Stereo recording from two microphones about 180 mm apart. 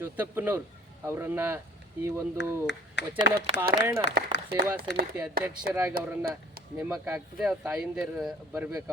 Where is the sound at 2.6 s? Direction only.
75° left (ahead or behind).